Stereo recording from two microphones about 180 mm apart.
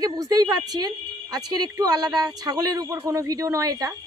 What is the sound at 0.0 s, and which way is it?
Speech, 20° right (ahead or behind).